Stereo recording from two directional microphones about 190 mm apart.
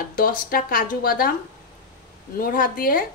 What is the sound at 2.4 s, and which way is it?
Speech, 50° left (ahead or behind).